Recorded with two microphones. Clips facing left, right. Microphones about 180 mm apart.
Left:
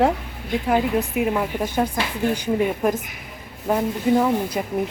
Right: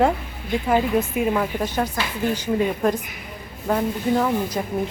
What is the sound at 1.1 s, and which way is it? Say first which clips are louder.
Speech: even; 5° left (ahead or behind).